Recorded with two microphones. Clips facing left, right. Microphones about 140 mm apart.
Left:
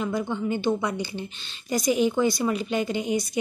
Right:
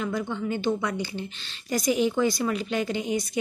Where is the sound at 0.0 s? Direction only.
10° left (ahead or behind).